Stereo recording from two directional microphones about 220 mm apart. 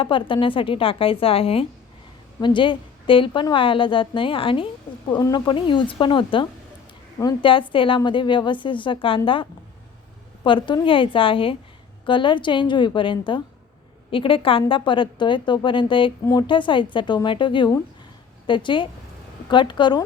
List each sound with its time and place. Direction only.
0.0 s a woman's voice: 25° left (ahead or behind)